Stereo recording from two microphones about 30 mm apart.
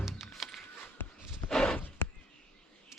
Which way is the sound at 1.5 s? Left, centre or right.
Left.